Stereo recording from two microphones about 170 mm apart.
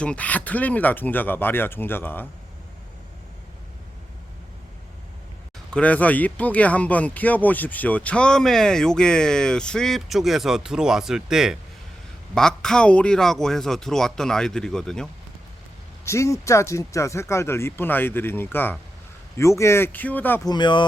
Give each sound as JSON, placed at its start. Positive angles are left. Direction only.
{"t": 0.0, "sound": "speech", "side_deg": 5}
{"t": 5.7, "sound": "speech", "side_deg": 10}
{"t": 16.0, "sound": "speech", "side_deg": 15}
{"t": 20.5, "sound": "speech", "side_deg": 25}